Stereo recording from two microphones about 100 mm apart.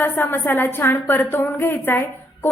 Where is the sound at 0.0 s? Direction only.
20° left (ahead or behind).